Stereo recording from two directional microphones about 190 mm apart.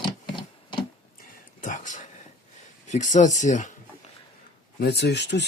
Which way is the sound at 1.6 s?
40° left (ahead or behind).